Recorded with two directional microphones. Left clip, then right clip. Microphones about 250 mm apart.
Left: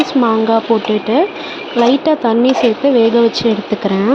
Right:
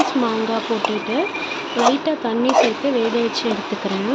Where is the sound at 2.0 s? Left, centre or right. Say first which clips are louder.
Left 8 dB; left.